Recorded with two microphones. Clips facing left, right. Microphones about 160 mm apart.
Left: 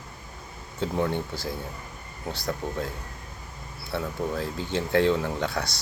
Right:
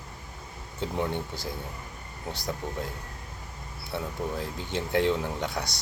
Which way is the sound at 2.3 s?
15° right (ahead or behind).